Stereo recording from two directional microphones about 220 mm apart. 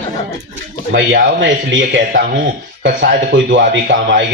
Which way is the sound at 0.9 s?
50° right (ahead or behind).